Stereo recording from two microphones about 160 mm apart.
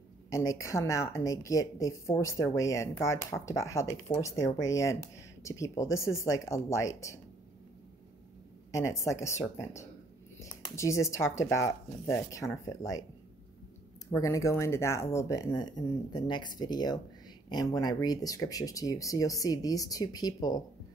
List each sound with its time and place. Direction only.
0.3 s a woman's voice: 20° left (ahead or behind)
8.7 s a woman's voice: 20° left (ahead or behind)
14.1 s a woman's voice: 20° left (ahead or behind)